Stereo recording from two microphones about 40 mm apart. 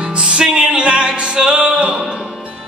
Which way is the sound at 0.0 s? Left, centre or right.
Right.